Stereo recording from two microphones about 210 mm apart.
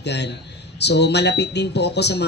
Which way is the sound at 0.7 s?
55° left (ahead or behind).